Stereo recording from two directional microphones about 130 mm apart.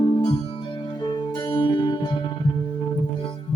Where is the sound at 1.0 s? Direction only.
35° left (ahead or behind).